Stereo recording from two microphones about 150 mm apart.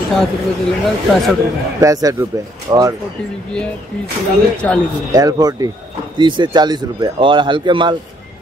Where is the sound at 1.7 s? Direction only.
20° right (ahead or behind).